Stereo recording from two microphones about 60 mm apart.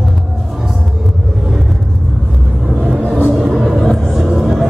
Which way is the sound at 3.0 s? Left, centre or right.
Left.